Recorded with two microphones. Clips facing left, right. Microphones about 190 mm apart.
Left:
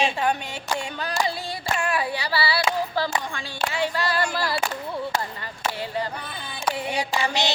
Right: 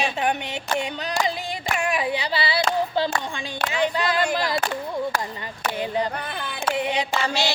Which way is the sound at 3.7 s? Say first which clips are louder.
Right 3 dB; 20° right (ahead or behind).